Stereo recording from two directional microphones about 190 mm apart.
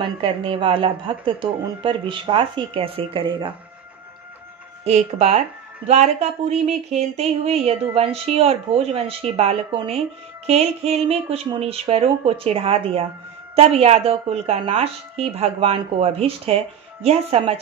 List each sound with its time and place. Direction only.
0.0 s speech: 25° right (ahead or behind)
4.8 s speech: 35° right (ahead or behind)